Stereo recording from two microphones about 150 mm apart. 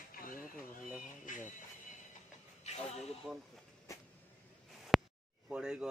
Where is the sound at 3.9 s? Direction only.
20° left (ahead or behind).